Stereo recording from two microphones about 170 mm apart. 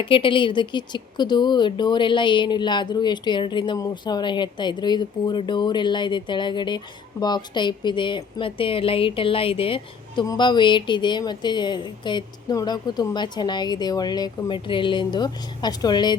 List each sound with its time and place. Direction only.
0.0 s speech: 30° left (ahead or behind)